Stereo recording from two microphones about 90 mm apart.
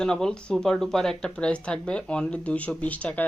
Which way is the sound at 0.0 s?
5° left (ahead or behind).